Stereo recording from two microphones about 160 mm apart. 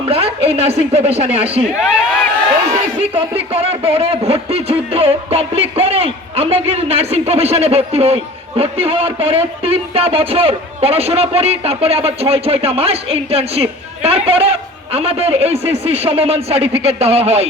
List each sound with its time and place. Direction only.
0.0 s a man's voice: 40° right (ahead or behind)
1.8 s speech: 5° right (ahead or behind)
3.0 s a man's voice: 35° right (ahead or behind)